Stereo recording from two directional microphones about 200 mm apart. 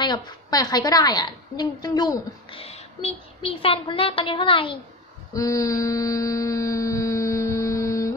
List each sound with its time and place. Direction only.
0.0 s a woman's voice: 20° left (ahead or behind)
5.3 s mantra: 15° left (ahead or behind)